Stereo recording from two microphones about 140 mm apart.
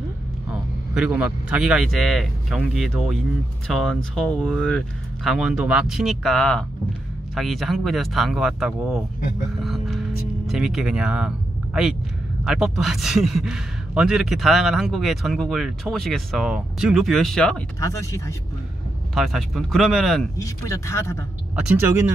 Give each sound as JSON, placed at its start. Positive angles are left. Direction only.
{"t": 0.9, "sound": "a man's voice", "side_deg": -5}
{"t": 9.7, "sound": "music", "side_deg": 0}
{"t": 12.4, "sound": "a man's voice", "side_deg": 0}
{"t": 17.7, "sound": "speech", "side_deg": 20}
{"t": 19.1, "sound": "a man's voice", "side_deg": 0}
{"t": 20.3, "sound": "speech", "side_deg": 20}
{"t": 21.5, "sound": "speech", "side_deg": -10}